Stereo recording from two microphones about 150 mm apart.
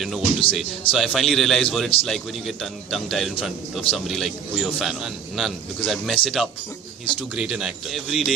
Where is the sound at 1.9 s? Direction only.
40° left (ahead or behind).